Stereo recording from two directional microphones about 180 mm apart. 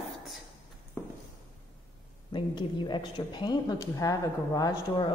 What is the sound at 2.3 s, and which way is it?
A woman's voice, 25° left (ahead or behind).